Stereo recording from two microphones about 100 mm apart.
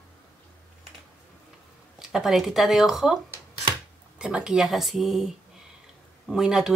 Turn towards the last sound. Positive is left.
turn(degrees=-5)  # may be behind; listen again after turning